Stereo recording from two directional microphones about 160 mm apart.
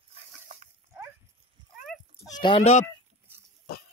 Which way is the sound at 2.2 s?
25° left (ahead or behind).